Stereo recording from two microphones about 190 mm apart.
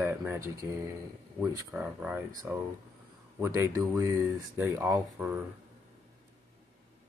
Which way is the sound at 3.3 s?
15° right (ahead or behind).